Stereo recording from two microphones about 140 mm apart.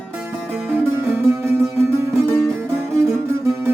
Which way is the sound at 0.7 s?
15° right (ahead or behind).